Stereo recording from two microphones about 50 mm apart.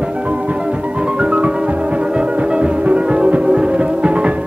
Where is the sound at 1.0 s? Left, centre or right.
Centre.